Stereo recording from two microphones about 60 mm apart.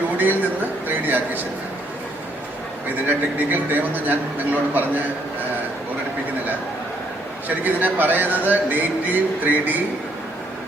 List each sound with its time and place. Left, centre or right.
0.2 s a sound: right
3.1 s a man's voice: right
7.4 s a man's voice: right